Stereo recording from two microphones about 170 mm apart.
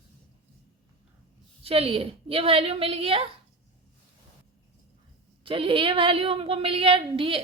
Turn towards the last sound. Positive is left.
turn(degrees=-30)  # may be behind; listen again after turning